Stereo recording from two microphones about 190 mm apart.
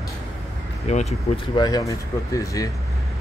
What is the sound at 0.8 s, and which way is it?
Speech, 35° left (ahead or behind).